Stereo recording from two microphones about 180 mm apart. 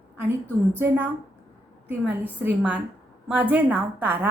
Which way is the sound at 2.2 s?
10° right (ahead or behind).